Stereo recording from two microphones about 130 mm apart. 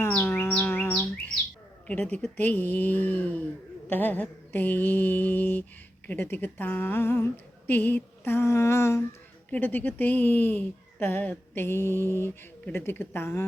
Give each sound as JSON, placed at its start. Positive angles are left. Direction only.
{"t": 0.2, "sound": "bird", "side_deg": 20}
{"t": 1.9, "sound": "speech", "side_deg": 10}